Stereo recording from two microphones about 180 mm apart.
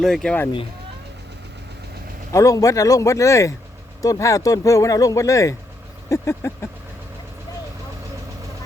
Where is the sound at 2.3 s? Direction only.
15° left (ahead or behind).